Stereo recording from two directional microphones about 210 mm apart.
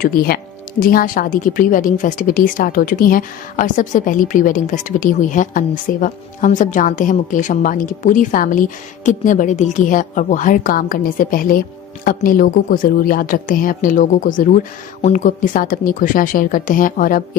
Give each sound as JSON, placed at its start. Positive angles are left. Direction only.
{"t": 0.0, "sound": "speech", "side_deg": 45}